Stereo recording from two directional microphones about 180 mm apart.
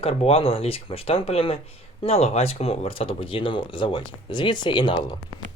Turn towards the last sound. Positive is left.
turn(degrees=25)  # may be behind; listen again after turning